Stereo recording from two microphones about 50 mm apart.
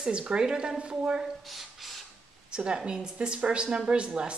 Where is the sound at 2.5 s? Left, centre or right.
Centre.